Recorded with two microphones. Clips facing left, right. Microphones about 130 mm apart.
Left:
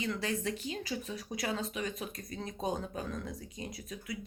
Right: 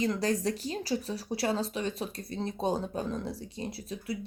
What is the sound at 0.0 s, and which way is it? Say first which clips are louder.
Speech: right 6 dB; 40° right (ahead or behind).